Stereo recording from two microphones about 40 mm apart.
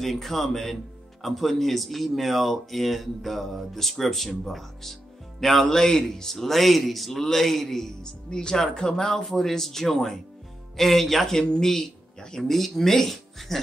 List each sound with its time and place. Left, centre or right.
0.0 s speech: centre